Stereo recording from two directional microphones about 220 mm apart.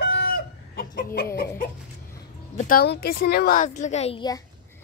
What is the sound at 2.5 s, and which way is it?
A child's voice, 40° left (ahead or behind).